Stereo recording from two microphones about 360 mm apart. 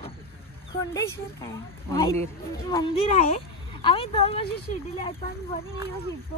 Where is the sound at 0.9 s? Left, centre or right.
Centre.